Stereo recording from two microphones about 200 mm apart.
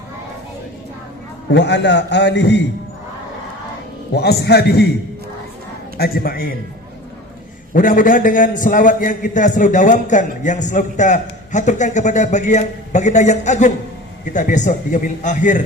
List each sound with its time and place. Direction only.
1.5 s a man's voice: 60° left (ahead or behind)
4.1 s a man's voice: 55° left (ahead or behind)
6.0 s a man's voice: 50° left (ahead or behind)
7.7 s a man's voice: 40° left (ahead or behind)